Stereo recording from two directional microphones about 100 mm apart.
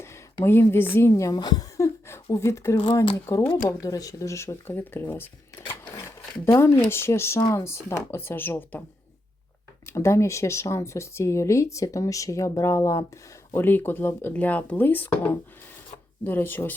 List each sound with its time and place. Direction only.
0.0 s a woman's voice: 25° left (ahead or behind)
1.4 s speech: 45° left (ahead or behind)
1.8 s a sound: 25° left (ahead or behind)
2.3 s speech: 30° left (ahead or behind)
9.8 s speech: 30° left (ahead or behind)